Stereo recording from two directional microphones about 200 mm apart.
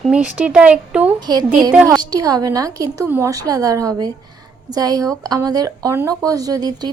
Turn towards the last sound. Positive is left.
turn(degrees=-20)  # may be behind; listen again after turning